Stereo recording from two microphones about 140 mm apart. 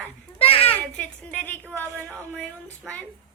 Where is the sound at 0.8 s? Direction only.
10° left (ahead or behind).